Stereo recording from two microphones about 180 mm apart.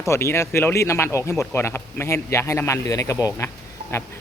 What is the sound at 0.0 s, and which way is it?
A man's voice, 15° left (ahead or behind).